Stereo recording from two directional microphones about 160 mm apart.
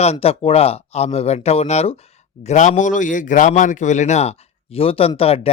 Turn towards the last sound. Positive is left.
turn(degrees=40)  # may be behind; listen again after turning